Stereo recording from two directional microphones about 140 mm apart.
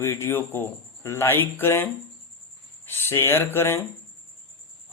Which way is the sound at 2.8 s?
15° left (ahead or behind).